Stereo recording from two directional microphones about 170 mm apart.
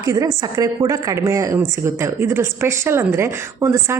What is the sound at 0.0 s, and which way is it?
Speech, 20° right (ahead or behind).